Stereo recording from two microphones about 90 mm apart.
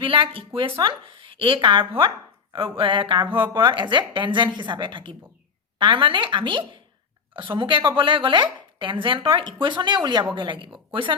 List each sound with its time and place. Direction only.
0.0 s a woman's voice: 75° right (ahead or behind)